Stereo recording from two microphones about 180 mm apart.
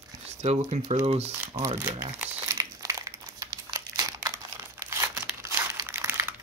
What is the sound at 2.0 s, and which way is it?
Crumpling, 15° right (ahead or behind).